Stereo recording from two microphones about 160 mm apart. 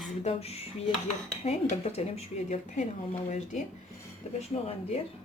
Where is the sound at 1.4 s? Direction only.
40° left (ahead or behind).